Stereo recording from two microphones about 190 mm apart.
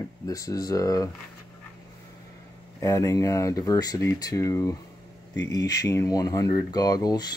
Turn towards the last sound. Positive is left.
turn(degrees=20)  # may be behind; listen again after turning